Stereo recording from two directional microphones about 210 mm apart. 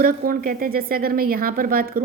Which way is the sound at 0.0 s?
45° right (ahead or behind).